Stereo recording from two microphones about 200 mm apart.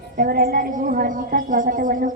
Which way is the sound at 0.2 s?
50° right (ahead or behind).